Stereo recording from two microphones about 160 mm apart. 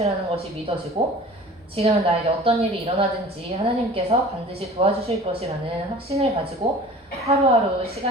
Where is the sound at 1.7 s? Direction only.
40° right (ahead or behind).